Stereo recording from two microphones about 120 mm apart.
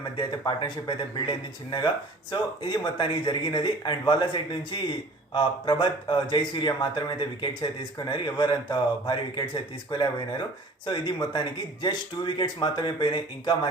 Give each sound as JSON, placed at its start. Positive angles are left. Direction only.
{"t": 0.2, "sound": "speech", "side_deg": 40}